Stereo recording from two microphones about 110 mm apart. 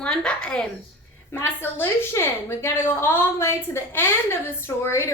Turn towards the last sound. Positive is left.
turn(degrees=25)  # may be behind; listen again after turning